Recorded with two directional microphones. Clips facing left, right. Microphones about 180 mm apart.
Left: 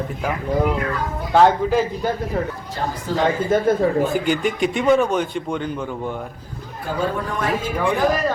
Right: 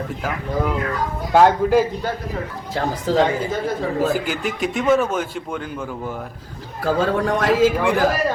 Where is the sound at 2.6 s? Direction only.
90° right.